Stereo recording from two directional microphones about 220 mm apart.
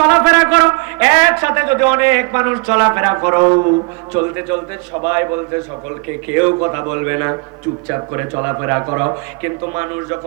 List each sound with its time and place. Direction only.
0.0 s a man's voice: 10° right (ahead or behind)